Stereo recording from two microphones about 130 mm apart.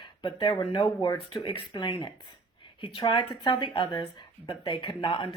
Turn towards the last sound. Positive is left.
turn(degrees=40)  # may be behind; listen again after turning